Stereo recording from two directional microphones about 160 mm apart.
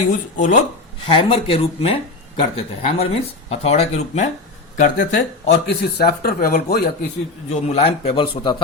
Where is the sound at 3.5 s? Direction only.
40° left (ahead or behind).